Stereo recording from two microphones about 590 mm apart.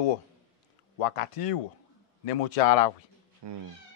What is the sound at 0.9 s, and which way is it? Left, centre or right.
A man's voice, left.